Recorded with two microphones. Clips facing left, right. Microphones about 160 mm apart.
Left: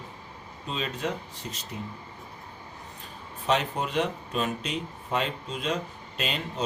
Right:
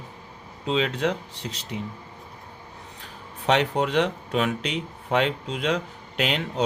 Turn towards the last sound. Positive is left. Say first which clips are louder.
# right 6 dB
turn(degrees=-80)